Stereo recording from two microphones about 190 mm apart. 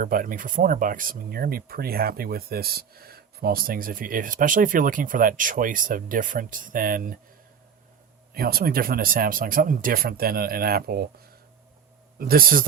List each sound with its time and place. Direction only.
0.0 s speech: 45° right (ahead or behind)
8.3 s speech: 50° right (ahead or behind)
12.2 s speech: 50° right (ahead or behind)